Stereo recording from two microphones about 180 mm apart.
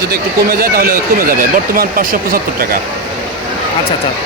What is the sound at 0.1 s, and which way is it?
Speech, 55° right (ahead or behind).